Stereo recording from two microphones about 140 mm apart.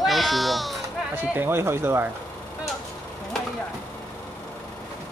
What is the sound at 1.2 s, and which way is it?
Speech, 15° right (ahead or behind).